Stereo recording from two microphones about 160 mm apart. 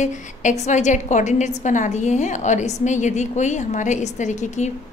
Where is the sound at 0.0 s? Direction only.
50° left (ahead or behind).